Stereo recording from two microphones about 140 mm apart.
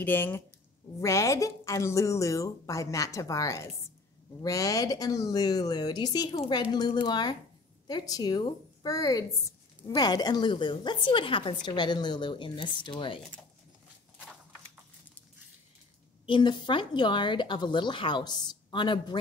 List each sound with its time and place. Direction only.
0.0 s a woman's voice: 15° left (ahead or behind); by 13.2 s 35° left (ahead or behind)
16.3 s a woman's voice: 35° left (ahead or behind)